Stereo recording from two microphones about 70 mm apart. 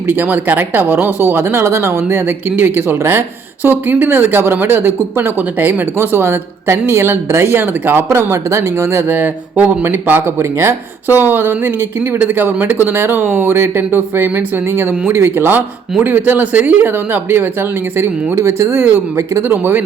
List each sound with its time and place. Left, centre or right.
0.1 s speech: right
8.1 s speech: right
9.0 s speech: right